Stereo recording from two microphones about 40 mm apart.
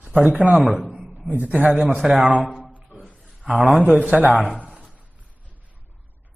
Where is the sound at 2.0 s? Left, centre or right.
Right.